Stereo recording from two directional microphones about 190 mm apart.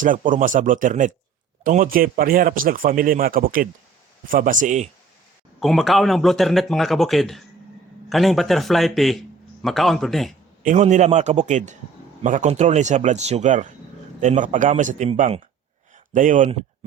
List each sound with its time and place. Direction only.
0.0 s a man's voice: 45° right (ahead or behind)
5.5 s a man's voice: centre (ahead or behind)
10.6 s speech: 40° right (ahead or behind)